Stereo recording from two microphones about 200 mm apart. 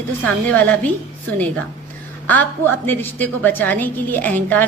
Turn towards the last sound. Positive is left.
turn(degrees=10)  # may be behind; listen again after turning